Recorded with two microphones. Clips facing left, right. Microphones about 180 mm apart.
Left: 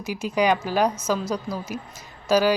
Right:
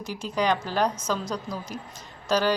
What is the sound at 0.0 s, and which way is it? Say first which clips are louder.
A woman's voice: left 4 dB; 10° left (ahead or behind).